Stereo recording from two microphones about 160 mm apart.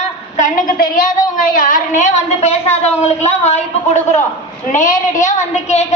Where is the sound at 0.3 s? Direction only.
55° left (ahead or behind).